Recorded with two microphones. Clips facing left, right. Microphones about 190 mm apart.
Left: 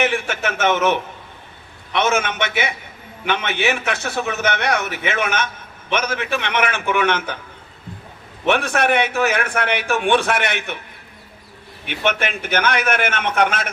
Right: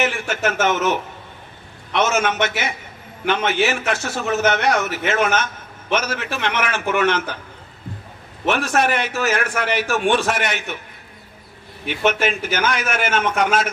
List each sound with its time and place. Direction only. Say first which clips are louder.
0.0 s a man's voice: even; 60° left (ahead or behind)
8.4 s a man's voice: left 1 dB; 60° left (ahead or behind)
11.9 s a man's voice: right 2 dB; 60° left (ahead or behind)